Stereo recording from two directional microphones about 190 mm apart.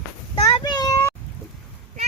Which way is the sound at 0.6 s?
20° left (ahead or behind).